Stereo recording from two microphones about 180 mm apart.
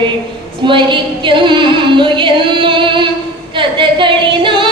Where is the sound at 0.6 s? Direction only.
25° right (ahead or behind).